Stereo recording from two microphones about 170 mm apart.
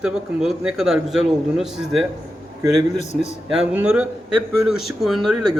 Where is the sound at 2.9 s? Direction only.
40° left (ahead or behind).